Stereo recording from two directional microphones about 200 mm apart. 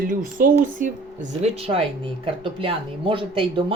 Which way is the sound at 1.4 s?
30° right (ahead or behind).